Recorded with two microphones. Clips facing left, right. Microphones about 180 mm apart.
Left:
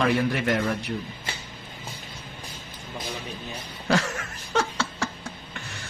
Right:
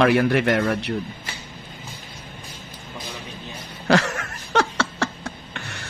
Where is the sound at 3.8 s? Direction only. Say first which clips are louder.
Right 5 dB; 70° right (ahead or behind).